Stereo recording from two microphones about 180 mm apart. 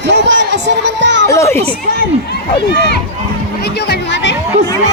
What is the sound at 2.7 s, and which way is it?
Speech, 65° left (ahead or behind).